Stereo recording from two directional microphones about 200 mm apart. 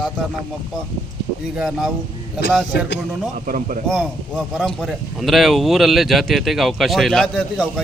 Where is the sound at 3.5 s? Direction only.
45° right (ahead or behind).